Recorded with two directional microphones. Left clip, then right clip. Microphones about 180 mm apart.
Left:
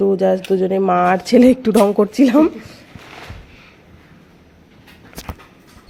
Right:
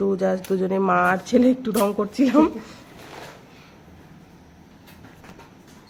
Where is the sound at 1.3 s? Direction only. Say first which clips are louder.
Left 11 dB; 35° left (ahead or behind).